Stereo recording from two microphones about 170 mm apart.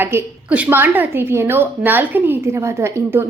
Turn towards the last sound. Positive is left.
turn(degrees=-15)  # may be behind; listen again after turning